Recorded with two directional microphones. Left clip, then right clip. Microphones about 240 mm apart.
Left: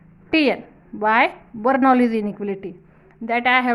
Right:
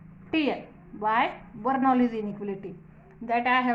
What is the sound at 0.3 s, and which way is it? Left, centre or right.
A woman's voice, left.